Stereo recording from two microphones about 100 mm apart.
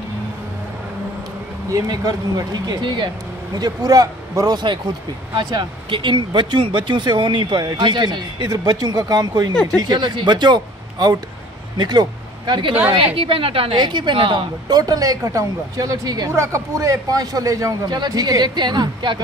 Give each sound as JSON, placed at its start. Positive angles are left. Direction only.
{"t": 1.7, "sound": "speech", "side_deg": -40}
{"t": 12.9, "sound": "a woman's voice", "side_deg": -65}
{"t": 13.7, "sound": "speech", "side_deg": -50}
{"t": 14.7, "sound": "speech", "side_deg": -40}